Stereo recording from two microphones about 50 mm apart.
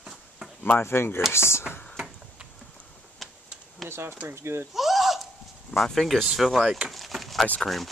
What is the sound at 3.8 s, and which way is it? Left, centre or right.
Speech, right.